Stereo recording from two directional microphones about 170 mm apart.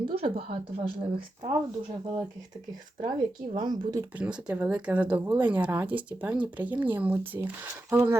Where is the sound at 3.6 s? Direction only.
25° right (ahead or behind).